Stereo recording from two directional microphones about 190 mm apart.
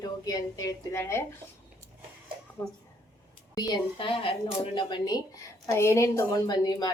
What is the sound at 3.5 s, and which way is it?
A woman's voice, 25° left (ahead or behind).